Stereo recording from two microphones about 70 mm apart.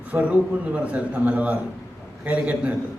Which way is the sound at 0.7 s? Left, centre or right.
Centre.